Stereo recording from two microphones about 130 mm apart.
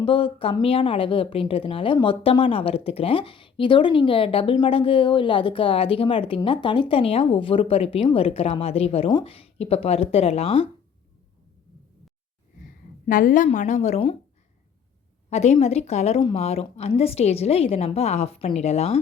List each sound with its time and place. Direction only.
0.0 s a woman's voice: 40° left (ahead or behind)
13.1 s a woman's voice: 90° left; by 14.0 s 60° left (ahead or behind)
15.3 s a woman's voice: 60° left (ahead or behind)